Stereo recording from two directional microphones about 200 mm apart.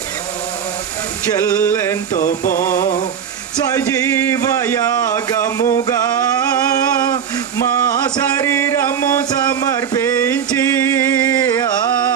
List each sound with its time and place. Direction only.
1.3 s music: 15° left (ahead or behind)
2.1 s music: 45° left (ahead or behind)
2.6 s music: 15° left (ahead or behind)
4.6 s music: 15° left (ahead or behind)
8.4 s a sound: 15° left (ahead or behind)